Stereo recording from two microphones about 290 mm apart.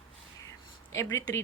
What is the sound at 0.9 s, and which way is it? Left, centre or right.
Speech, centre.